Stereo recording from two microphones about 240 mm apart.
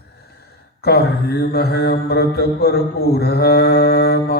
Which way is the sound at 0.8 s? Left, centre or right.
Left.